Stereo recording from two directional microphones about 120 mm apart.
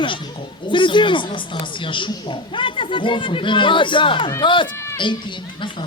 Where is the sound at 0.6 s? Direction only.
45° left (ahead or behind).